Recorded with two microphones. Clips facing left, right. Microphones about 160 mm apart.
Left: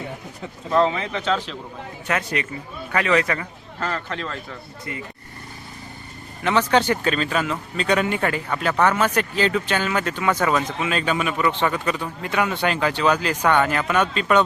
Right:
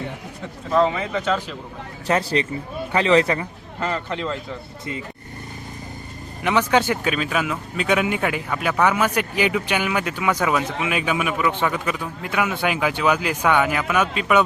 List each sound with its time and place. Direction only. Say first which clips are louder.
0.7 s speech: right 1 dB; centre (ahead or behind)
2.0 s speech: right 4 dB; 30° right (ahead or behind)
3.8 s a man's voice: right 2 dB; 15° right (ahead or behind)
6.4 s a man's voice: even; 10° right (ahead or behind)